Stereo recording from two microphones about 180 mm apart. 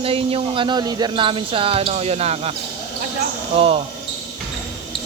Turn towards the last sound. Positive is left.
turn(degrees=-30)  # may be behind; listen again after turning